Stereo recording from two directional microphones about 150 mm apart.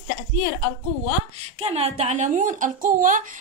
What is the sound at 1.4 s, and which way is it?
A woman's voice, 45° right (ahead or behind).